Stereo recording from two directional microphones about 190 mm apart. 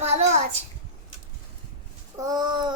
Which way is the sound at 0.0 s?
35° right (ahead or behind).